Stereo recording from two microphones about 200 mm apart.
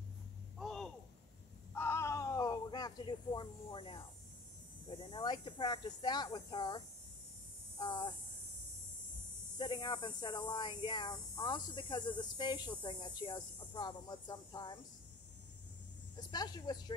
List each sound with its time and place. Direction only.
0.6 s a sound: centre (ahead or behind); by 4.0 s 25° left (ahead or behind)
4.8 s speech: 25° left (ahead or behind)
7.8 s speech: 25° left (ahead or behind)
9.6 s speech: 20° left (ahead or behind)
16.2 s speech: 20° left (ahead or behind)